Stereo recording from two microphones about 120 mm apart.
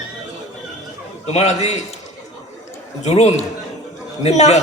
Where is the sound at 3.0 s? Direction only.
65° left (ahead or behind).